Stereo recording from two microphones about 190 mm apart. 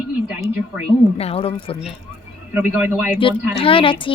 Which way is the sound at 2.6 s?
10° right (ahead or behind).